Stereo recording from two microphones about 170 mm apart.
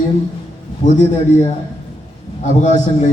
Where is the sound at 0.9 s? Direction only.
45° left (ahead or behind).